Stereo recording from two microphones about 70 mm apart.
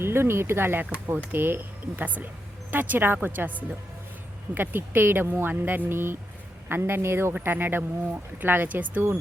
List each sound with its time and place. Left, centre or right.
0.0 s speech: right